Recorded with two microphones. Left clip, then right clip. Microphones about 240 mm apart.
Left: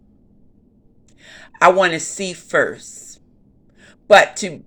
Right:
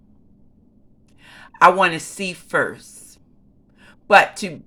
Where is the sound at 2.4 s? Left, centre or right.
Right.